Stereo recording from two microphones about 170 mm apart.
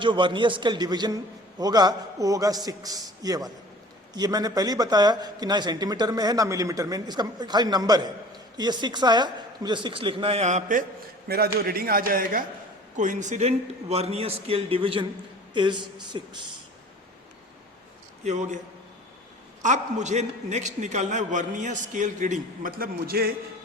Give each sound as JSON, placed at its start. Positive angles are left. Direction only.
{"t": 0.0, "sound": "a man's voice", "side_deg": -30}
{"t": 11.3, "sound": "a man's voice", "side_deg": -65}
{"t": 18.2, "sound": "a man's voice", "side_deg": -45}
{"t": 19.6, "sound": "a man's voice", "side_deg": -45}